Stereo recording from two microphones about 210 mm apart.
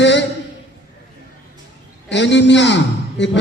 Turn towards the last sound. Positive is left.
turn(degrees=60)  # may be behind; listen again after turning